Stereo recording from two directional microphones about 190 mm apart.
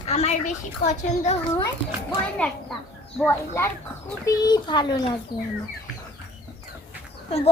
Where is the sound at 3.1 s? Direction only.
15° left (ahead or behind).